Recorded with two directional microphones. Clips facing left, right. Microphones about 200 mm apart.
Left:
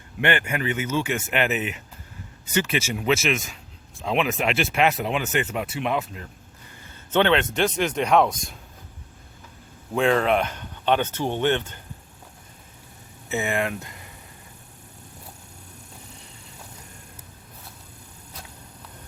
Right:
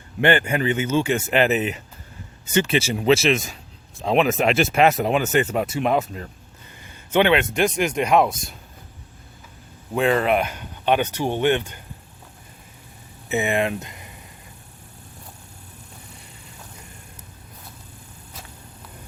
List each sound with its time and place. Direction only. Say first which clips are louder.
0.2 s speech: right 5 dB; 35° right (ahead or behind)
6.8 s speech: right 2 dB; 10° right (ahead or behind)
9.9 s speech: right 1 dB; 5° right (ahead or behind)
13.2 s speech: right 4 dB; 20° right (ahead or behind)